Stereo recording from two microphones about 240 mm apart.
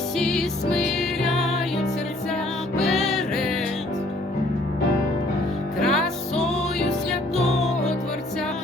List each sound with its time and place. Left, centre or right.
0.2 s music: centre
5.8 s music: centre
7.3 s music: left